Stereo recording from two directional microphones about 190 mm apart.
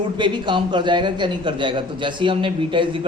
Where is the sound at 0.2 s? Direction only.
25° right (ahead or behind).